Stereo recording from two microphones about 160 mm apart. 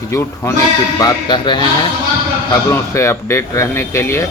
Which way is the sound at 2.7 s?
15° left (ahead or behind).